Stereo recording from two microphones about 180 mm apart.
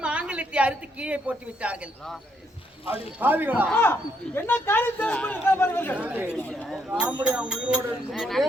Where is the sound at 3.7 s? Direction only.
10° left (ahead or behind).